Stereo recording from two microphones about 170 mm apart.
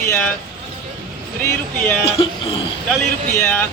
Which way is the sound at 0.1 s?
10° left (ahead or behind).